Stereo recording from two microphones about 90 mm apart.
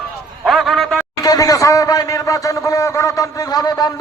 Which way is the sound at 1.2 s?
40° left (ahead or behind).